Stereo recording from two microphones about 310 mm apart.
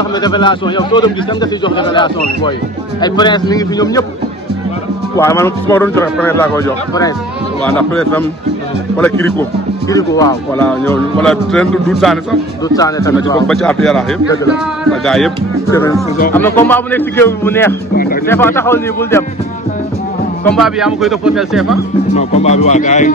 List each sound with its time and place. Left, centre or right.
0.1 s a man's voice: centre
5.1 s a man's voice: centre
12.6 s a man's voice: centre
17.9 s speech: left
18.2 s a man's voice: centre
20.4 s speech: centre
22.1 s speech: left